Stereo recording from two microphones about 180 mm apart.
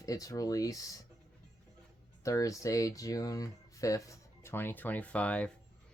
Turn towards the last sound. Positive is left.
turn(degrees=5)  # may be behind; listen again after turning